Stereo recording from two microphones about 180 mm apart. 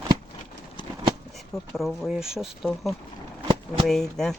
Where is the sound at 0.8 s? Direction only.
25° left (ahead or behind).